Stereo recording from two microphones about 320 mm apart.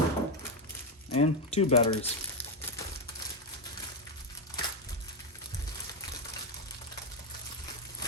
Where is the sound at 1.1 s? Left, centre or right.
Centre.